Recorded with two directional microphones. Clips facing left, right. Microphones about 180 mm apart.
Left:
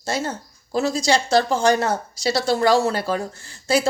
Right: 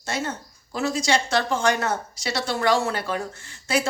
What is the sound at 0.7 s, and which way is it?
Speech, 35° left (ahead or behind).